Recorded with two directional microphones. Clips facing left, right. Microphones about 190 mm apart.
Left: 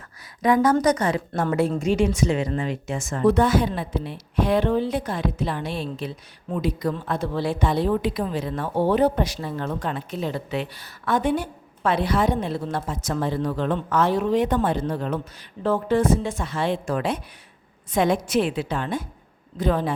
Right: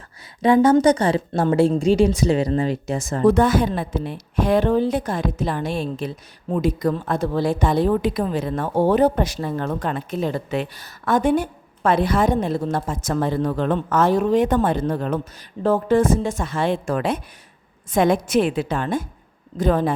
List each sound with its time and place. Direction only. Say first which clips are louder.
0.4 s a woman's voice: right 4 dB; 25° right (ahead or behind); by 19.9 s 45° right (ahead or behind)